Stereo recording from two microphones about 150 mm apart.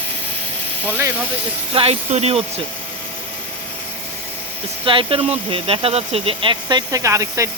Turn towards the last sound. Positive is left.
turn(degrees=-20)  # may be behind; listen again after turning